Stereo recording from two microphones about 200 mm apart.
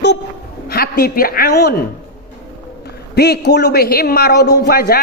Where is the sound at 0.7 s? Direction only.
50° left (ahead or behind).